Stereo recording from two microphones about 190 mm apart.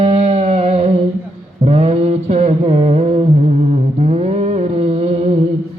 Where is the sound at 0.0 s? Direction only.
35° right (ahead or behind).